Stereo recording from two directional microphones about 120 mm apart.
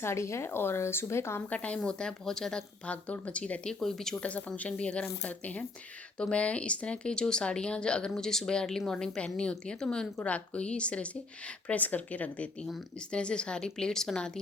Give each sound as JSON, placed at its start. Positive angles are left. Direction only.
{"t": 0.0, "sound": "a woman's voice", "side_deg": 25}
{"t": 1.5, "sound": "speech", "side_deg": 10}